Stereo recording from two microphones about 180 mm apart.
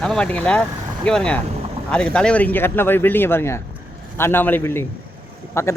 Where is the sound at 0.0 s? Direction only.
5° left (ahead or behind).